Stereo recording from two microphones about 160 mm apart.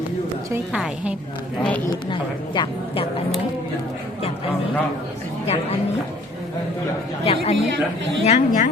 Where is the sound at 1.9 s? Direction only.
30° left (ahead or behind).